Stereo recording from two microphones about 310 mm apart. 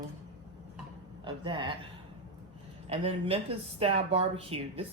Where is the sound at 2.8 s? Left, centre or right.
Centre.